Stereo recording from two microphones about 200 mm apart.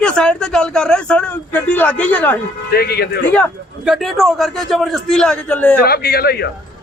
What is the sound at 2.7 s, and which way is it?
Speech, 50° left (ahead or behind).